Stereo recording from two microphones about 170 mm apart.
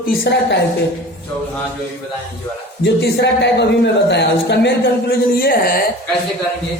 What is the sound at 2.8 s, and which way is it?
A man's voice, 80° left.